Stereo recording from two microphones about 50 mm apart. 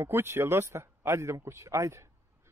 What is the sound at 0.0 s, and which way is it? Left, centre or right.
Speech, right.